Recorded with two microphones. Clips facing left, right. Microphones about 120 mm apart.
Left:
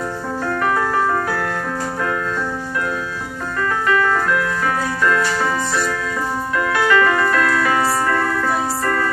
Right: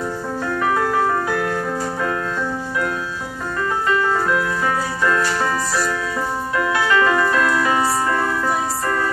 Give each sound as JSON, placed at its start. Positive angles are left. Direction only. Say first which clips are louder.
{"t": 5.0, "sound": "music", "louder": "left 1 dB", "side_deg": -25}